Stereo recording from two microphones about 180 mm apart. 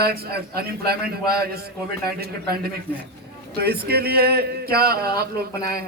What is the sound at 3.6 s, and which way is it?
A man's voice, 60° right (ahead or behind).